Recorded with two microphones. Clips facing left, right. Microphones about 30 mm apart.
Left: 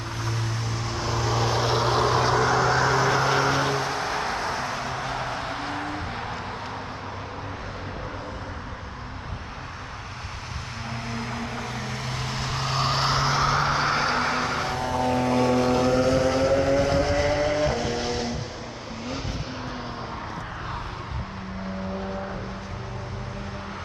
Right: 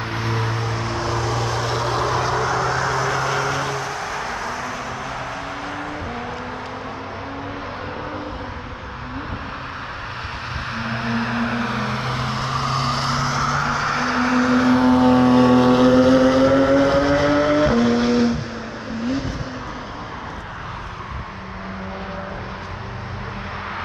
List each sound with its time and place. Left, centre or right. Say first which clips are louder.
0.1 s vehicle: right 6 dB; right; by 3.3 s centre
3.3 s vehicle: even; left
10.8 s vehicle: right 9 dB; right; by 14.1 s left
14.5 s vehicle: right 11 dB; right; by 18.4 s centre
19.0 s vehicle: right 9 dB; centre